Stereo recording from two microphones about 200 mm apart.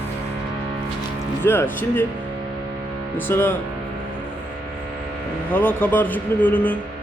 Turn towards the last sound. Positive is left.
turn(degrees=10)  # may be behind; listen again after turning